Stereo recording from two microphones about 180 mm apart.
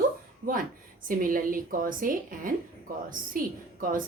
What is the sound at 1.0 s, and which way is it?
A woman's voice, 50° right (ahead or behind).